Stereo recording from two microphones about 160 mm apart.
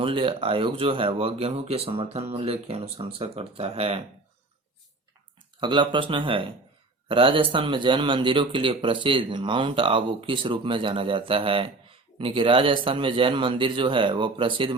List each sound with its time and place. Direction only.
0.0 s speech: 35° right (ahead or behind)
5.5 s speech: 30° right (ahead or behind)